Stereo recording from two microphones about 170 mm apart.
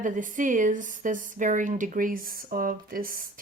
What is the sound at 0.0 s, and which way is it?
Speech, 50° right (ahead or behind).